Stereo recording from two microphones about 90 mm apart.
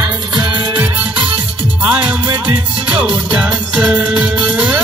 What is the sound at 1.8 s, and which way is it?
Music, 15° right (ahead or behind).